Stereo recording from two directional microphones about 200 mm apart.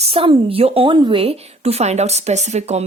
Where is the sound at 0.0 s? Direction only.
30° right (ahead or behind).